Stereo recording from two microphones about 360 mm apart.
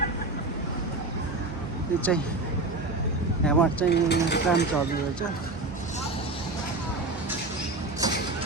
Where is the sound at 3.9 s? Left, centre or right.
Left.